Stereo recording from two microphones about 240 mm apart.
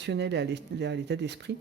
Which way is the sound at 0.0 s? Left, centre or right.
Right.